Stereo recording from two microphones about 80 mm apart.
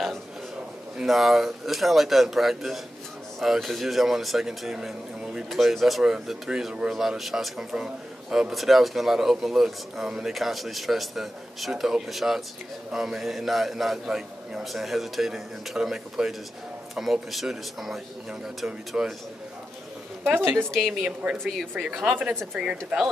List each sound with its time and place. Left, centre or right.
0.9 s a man's voice: centre
20.2 s a woman's voice: right
20.5 s a man's voice: centre
21.0 s speech: centre
21.4 s a man's voice: centre